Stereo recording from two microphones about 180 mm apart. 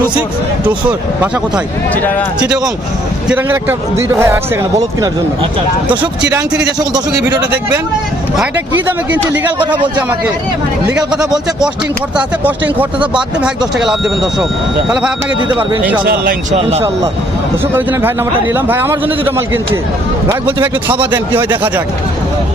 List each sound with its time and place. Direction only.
0.6 s speech: 10° right (ahead or behind)
3.2 s speech: 10° right (ahead or behind)
6.7 s speech: 20° right (ahead or behind)
10.8 s speech: 5° right (ahead or behind)
16.0 s speech: 55° right (ahead or behind)
16.6 s speech: 35° right (ahead or behind)
18.5 s speech: 10° right (ahead or behind)